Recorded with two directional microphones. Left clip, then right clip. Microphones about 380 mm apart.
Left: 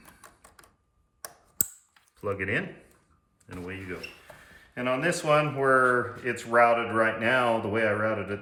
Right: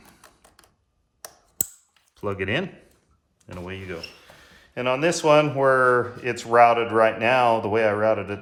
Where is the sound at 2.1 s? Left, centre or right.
Centre.